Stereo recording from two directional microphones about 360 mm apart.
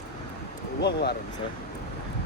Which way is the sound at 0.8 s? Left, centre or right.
Left.